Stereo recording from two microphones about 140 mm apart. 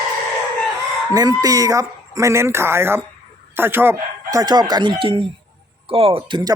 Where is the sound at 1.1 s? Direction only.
25° right (ahead or behind).